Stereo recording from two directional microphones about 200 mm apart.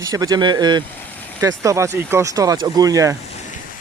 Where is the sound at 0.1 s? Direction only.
15° right (ahead or behind).